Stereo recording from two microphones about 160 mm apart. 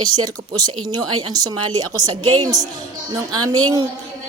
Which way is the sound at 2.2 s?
35° right (ahead or behind).